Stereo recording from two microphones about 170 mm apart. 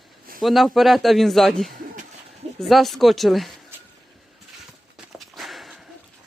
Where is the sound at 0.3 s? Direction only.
Centre (ahead or behind).